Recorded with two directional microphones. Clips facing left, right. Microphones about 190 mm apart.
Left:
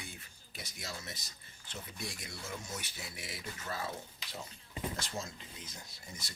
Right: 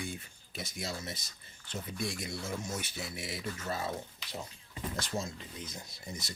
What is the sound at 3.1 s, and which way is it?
Speech, 25° right (ahead or behind).